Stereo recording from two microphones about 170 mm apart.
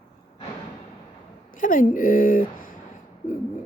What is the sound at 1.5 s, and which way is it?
A woman's voice, 50° left (ahead or behind).